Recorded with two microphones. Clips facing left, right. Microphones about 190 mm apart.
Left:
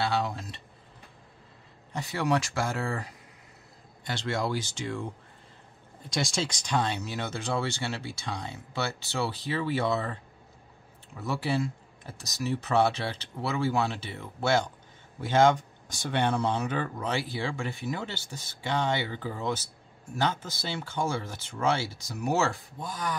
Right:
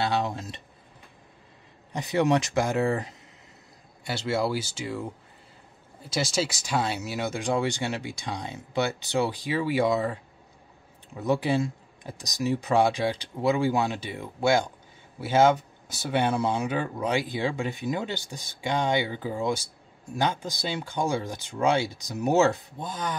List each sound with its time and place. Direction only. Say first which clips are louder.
0.0 s speech: right 2 dB; 20° right (ahead or behind)
1.9 s speech: right 5 dB; 20° right (ahead or behind)
4.0 s speech: right 4 dB; 5° right (ahead or behind)
6.0 s speech: right 3 dB; 5° right (ahead or behind); by 23.1 s 25° right (ahead or behind)